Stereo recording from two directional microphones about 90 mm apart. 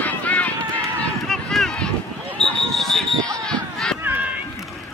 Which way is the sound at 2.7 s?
5° left (ahead or behind).